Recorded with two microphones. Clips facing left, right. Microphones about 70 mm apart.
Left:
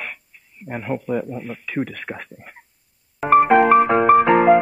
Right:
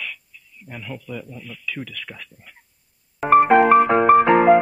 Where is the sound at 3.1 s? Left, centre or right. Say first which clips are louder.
Even; centre.